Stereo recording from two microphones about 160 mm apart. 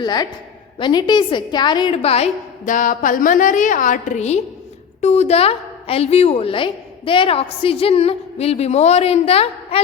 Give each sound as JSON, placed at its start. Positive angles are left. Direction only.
{"t": 0.0, "sound": "a woman's voice", "side_deg": 25}